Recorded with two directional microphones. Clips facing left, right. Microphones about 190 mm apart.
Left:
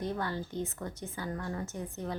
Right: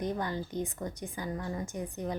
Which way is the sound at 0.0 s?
15° right (ahead or behind).